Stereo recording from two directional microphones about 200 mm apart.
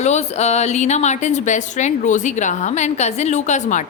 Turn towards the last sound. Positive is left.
turn(degrees=40)  # may be behind; listen again after turning